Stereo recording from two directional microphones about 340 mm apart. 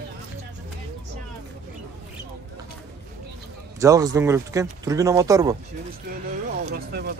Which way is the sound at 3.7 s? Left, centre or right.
Centre.